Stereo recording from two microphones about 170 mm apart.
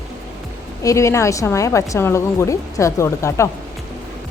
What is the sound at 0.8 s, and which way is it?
A woman's voice, 20° left (ahead or behind).